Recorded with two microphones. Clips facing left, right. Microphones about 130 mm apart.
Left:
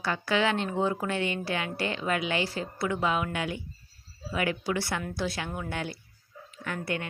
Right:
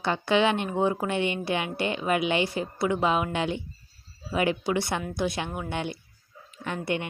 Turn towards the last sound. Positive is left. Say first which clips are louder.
# right 4 dB
turn(degrees=-20)  # may be behind; listen again after turning